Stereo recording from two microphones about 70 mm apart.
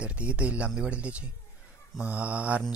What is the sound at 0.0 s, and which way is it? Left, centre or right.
A man's voice, centre.